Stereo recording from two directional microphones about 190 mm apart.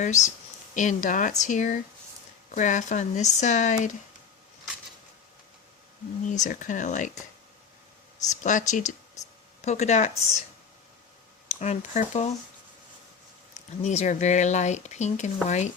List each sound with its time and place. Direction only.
0.0 s speech: 40° left (ahead or behind)
6.2 s speech: 40° left (ahead or behind)
8.3 s speech: 40° left (ahead or behind)
11.6 s speech: 35° left (ahead or behind)
13.8 s speech: 35° left (ahead or behind)